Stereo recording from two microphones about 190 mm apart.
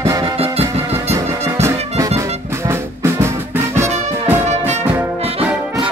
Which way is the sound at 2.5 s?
15° right (ahead or behind).